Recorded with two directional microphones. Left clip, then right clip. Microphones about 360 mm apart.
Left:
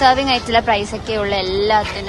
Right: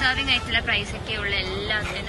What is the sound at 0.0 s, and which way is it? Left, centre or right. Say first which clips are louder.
Speech: left 8 dB; centre.